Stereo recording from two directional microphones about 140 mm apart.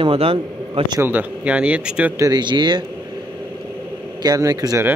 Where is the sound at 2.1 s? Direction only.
25° right (ahead or behind).